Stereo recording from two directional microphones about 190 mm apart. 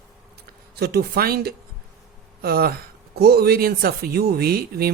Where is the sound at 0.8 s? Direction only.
55° right (ahead or behind).